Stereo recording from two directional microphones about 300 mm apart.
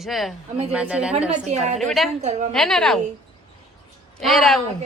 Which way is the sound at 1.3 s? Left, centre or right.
Right.